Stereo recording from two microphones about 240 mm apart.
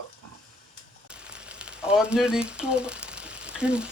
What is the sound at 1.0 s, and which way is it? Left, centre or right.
Speech, centre.